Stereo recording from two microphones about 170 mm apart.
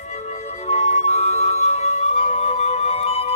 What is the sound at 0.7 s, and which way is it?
Music, 40° left (ahead or behind).